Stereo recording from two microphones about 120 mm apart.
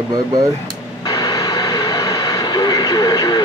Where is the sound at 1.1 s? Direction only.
30° left (ahead or behind).